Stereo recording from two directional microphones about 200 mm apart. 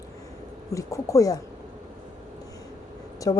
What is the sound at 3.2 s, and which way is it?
Speech, 15° left (ahead or behind).